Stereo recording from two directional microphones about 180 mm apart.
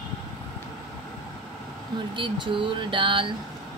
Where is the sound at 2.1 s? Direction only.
25° right (ahead or behind).